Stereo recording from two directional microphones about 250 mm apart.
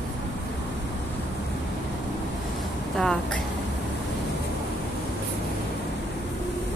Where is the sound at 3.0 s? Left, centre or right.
Centre.